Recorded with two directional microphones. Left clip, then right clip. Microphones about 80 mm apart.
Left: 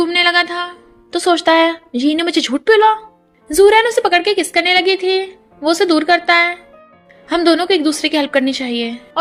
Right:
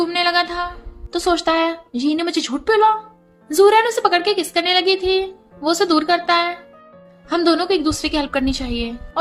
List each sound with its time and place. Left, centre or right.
0.0 s music: left
1.1 s a woman's voice: left
3.5 s a woman's voice: left